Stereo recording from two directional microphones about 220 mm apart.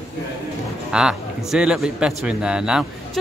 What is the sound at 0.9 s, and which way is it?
A man's voice, 5° right (ahead or behind).